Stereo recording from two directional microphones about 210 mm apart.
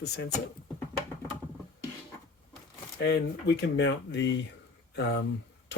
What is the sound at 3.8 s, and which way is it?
Speech, 60° left (ahead or behind).